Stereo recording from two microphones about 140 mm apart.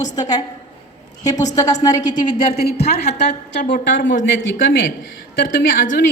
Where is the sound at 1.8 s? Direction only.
30° left (ahead or behind).